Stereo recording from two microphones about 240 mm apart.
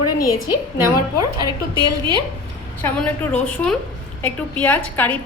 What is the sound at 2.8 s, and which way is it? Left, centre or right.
A woman's voice, centre.